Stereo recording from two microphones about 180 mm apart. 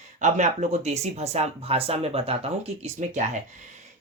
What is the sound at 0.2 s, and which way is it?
Speech, 40° right (ahead or behind).